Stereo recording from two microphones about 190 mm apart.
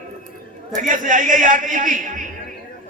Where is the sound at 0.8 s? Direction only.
45° right (ahead or behind).